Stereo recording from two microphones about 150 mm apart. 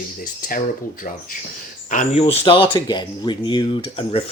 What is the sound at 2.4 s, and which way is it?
Speech, 30° left (ahead or behind).